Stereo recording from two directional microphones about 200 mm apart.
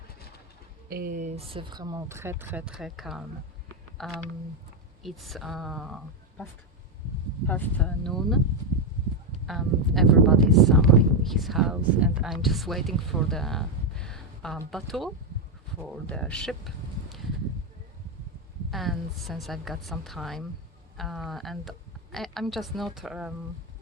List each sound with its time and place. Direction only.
0.9 s speech: 45° right (ahead or behind); by 8.4 s centre (ahead or behind)
9.5 s speech: centre (ahead or behind)
18.7 s speech: centre (ahead or behind)